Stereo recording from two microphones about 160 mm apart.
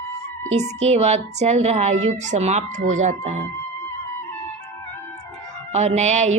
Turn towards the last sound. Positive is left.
turn(degrees=-45)  # may be behind; listen again after turning